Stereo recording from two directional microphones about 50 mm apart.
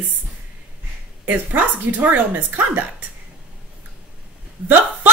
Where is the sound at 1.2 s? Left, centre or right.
Right.